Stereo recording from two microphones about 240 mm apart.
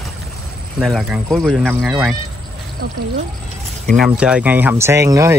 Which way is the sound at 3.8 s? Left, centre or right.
Centre.